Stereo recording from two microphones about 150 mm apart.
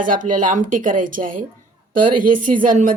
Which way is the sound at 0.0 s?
65° right (ahead or behind).